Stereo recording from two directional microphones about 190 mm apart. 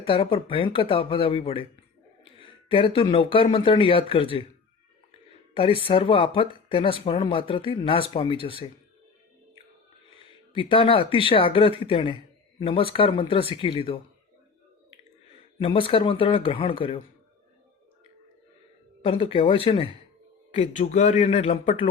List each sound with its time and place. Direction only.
0.0 s speech: 30° left (ahead or behind)
5.5 s speech: 30° left (ahead or behind)
10.5 s speech: 25° left (ahead or behind)
15.5 s speech: 30° left (ahead or behind)
19.0 s speech: 30° left (ahead or behind)